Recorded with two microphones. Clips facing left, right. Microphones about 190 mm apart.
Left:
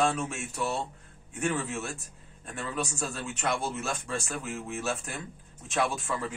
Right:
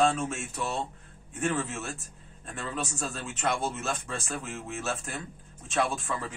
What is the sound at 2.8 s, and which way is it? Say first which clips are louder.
Speech: left 1 dB; centre (ahead or behind).